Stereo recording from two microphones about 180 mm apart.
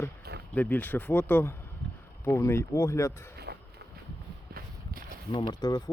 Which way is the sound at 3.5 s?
65° right (ahead or behind).